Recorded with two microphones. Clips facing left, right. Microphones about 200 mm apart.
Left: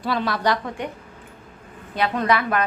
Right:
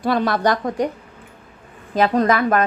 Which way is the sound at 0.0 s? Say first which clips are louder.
Right 5 dB; 50° right (ahead or behind).